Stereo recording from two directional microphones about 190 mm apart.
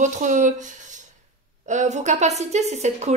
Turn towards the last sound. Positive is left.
turn(degrees=-35)  # may be behind; listen again after turning